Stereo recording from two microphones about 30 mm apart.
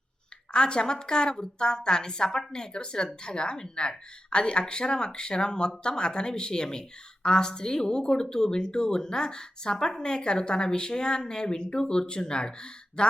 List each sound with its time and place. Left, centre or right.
0.5 s speech: left